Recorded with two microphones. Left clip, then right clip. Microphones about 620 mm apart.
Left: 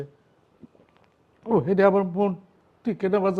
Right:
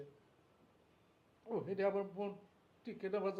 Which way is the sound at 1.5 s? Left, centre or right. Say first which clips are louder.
Left 18 dB; left.